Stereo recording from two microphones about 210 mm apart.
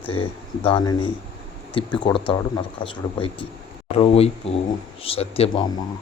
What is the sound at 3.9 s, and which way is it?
Speech, 25° left (ahead or behind).